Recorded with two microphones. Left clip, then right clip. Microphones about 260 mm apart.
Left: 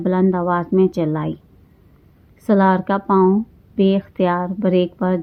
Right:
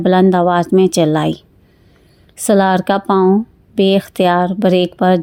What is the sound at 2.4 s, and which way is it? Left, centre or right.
Speech, right.